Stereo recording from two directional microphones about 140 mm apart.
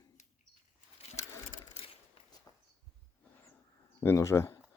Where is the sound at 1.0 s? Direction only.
45° left (ahead or behind).